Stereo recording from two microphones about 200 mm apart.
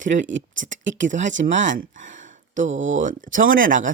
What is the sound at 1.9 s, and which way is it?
Speech, 70° right (ahead or behind).